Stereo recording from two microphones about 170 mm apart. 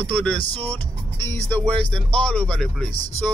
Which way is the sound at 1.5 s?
5° left (ahead or behind).